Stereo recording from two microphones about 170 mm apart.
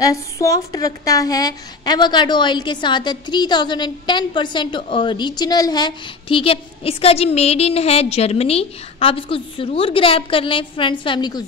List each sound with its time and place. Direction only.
0.0 s a woman's voice: 20° left (ahead or behind)